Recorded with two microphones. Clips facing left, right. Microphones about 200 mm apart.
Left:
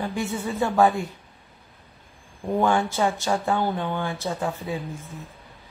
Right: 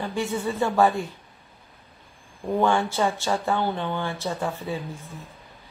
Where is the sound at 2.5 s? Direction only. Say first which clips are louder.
Even; 15° left (ahead or behind).